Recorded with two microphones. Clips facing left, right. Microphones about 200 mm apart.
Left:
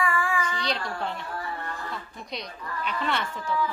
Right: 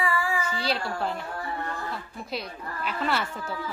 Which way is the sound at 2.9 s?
5° right (ahead or behind).